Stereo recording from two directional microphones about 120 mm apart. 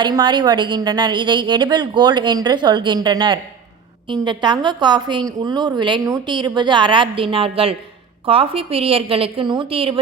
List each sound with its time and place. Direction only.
0.0 s a woman's voice: 40° right (ahead or behind)